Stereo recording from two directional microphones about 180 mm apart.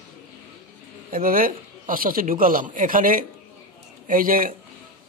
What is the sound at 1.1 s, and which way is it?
Speech, 50° right (ahead or behind).